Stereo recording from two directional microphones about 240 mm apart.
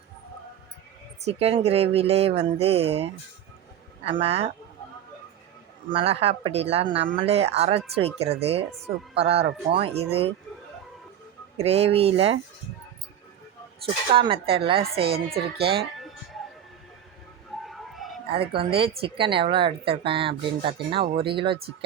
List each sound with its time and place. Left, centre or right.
1.2 s speech: right
5.9 s speech: right
11.6 s speech: right
13.8 s speech: right
15.8 s music: centre
17.6 s a sound: centre
18.3 s speech: right